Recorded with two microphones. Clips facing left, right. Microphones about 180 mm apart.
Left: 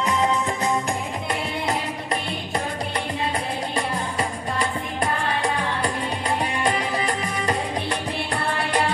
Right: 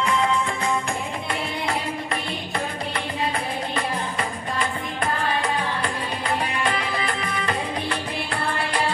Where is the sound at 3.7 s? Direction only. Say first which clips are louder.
Left 1 dB; 40° left (ahead or behind).